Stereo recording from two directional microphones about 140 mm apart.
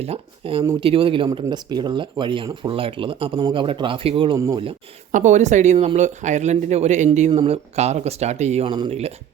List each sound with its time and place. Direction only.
0.0 s speech: 45° right (ahead or behind)
5.1 s speech: 60° right (ahead or behind)
8.6 s speech: 30° right (ahead or behind)
8.9 s speech: 50° right (ahead or behind)